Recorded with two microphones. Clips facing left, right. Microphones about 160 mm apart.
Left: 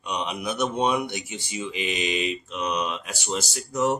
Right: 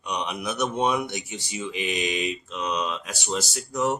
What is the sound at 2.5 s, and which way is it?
Speech, 15° left (ahead or behind).